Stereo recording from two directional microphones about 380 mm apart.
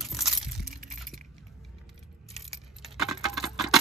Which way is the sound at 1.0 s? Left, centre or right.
Centre.